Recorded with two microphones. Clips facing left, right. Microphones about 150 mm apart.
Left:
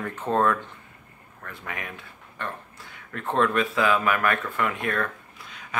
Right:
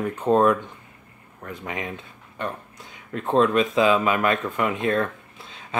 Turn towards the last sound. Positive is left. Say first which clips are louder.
# right 3 dB
turn(degrees=-25)  # may be behind; listen again after turning